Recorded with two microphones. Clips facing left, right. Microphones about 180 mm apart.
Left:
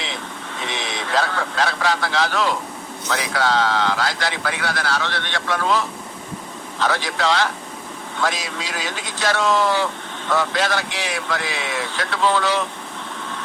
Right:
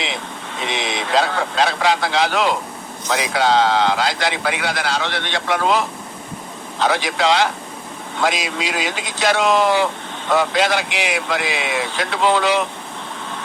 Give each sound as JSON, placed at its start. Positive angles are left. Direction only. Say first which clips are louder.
{"t": 0.6, "sound": "speech", "louder": "right 4 dB", "side_deg": -15}